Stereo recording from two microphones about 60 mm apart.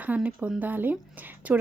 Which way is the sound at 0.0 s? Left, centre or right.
Right.